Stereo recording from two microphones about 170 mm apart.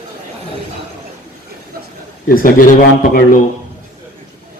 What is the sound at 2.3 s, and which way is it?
Speech, 55° left (ahead or behind).